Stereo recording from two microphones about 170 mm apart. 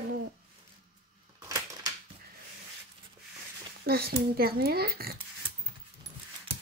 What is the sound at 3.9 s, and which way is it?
Speech, 65° right (ahead or behind).